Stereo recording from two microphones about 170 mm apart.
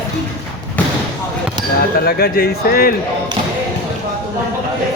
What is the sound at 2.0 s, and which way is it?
Speech, 60° left (ahead or behind).